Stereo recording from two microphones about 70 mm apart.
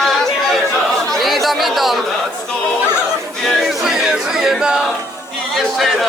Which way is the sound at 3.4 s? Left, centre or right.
Centre.